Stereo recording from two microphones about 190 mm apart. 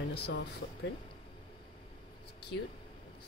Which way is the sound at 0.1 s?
60° left (ahead or behind).